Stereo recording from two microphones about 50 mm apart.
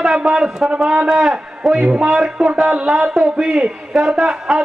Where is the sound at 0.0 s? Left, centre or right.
Centre.